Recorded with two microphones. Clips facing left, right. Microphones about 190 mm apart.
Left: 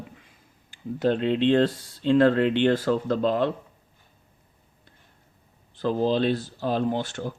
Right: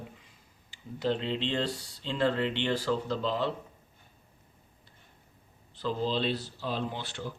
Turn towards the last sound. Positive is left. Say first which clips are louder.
# left 9 dB
turn(degrees=45)  # may be behind; listen again after turning